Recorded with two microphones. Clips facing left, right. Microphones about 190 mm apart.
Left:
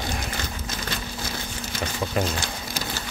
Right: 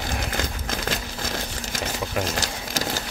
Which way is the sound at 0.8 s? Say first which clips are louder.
Right 3 dB; 90° right.